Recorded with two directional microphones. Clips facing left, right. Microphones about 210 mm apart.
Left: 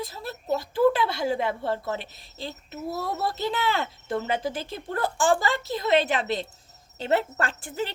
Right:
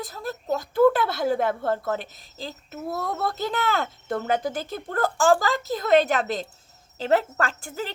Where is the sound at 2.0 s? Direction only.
40° right (ahead or behind).